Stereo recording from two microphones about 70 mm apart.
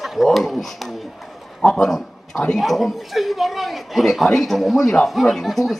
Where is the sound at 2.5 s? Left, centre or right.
Centre.